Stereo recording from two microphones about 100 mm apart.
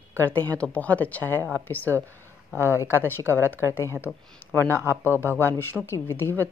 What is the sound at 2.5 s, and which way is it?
Speech, 20° right (ahead or behind).